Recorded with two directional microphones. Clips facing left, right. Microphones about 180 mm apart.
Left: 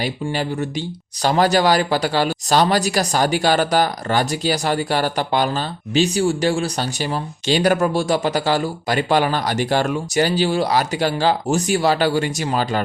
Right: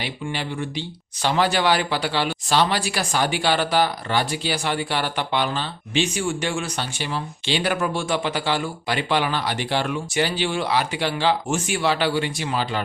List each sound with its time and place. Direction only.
0.0 s speech: 40° left (ahead or behind)